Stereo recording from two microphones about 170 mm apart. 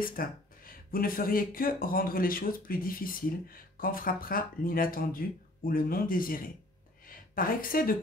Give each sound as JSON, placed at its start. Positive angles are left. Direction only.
{"t": 0.0, "sound": "a woman's voice", "side_deg": 55}